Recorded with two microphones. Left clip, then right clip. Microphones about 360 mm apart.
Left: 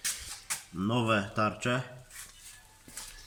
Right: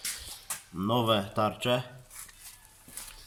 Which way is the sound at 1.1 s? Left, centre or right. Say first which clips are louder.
Right 2 dB; centre.